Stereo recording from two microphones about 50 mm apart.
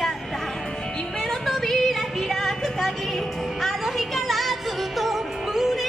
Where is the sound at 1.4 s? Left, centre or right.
Centre.